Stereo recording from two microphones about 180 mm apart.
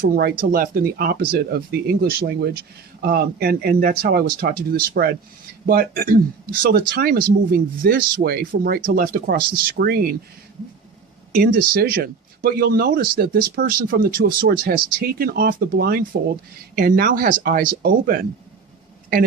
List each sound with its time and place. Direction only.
0.0 s speech: 60° right (ahead or behind)
11.3 s speech: 55° right (ahead or behind)